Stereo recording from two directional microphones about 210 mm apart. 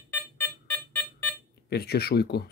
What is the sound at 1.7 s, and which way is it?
Speech, 50° left (ahead or behind).